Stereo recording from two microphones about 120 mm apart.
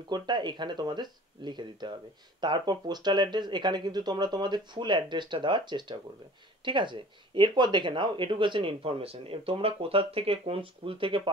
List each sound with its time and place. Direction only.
0.1 s a woman's voice: 40° right (ahead or behind)